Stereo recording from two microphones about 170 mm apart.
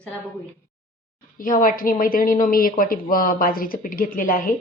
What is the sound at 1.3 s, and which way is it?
Speech, 55° left (ahead or behind).